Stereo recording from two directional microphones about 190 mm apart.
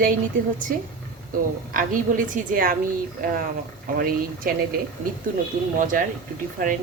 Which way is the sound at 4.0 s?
50° right (ahead or behind).